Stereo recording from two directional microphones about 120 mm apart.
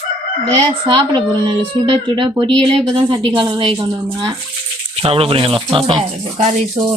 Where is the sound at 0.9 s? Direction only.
40° right (ahead or behind).